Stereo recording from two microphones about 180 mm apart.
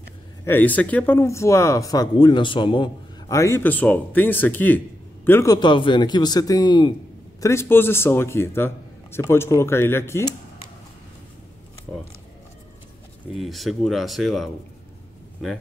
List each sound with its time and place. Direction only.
0.5 s speech: 10° left (ahead or behind)
13.3 s speech: centre (ahead or behind)